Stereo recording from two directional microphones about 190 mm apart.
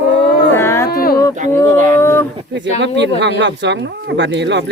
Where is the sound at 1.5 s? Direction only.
10° left (ahead or behind).